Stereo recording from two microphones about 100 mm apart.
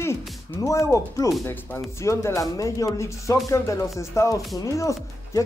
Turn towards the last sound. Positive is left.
turn(degrees=30)  # may be behind; listen again after turning